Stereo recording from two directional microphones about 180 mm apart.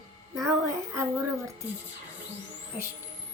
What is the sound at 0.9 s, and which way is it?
Speech, 15° right (ahead or behind).